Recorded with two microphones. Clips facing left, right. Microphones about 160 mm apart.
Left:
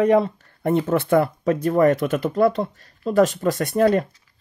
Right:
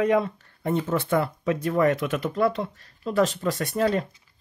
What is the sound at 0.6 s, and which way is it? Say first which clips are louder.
Speech: left 5 dB; 55° left (ahead or behind).